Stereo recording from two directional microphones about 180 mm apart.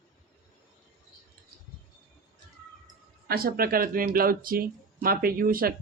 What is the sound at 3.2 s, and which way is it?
Speech, 55° right (ahead or behind).